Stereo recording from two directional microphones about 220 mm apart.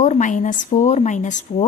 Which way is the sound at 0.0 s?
35° left (ahead or behind).